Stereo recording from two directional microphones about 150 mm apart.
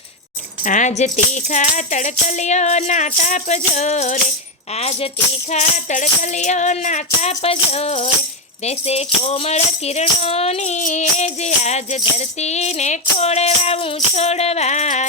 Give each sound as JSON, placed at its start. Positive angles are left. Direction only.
{"t": 0.6, "sound": "speech", "side_deg": 55}
{"t": 5.5, "sound": "speech", "side_deg": 55}